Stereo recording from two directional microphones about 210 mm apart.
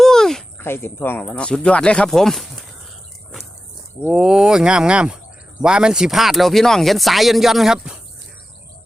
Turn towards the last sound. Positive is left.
turn(degrees=0)  # may be behind; listen again after turning